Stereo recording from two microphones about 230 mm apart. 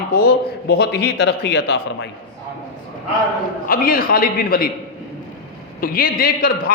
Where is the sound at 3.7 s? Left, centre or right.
Left.